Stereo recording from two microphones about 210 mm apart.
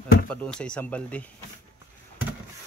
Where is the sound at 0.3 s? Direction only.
5° left (ahead or behind).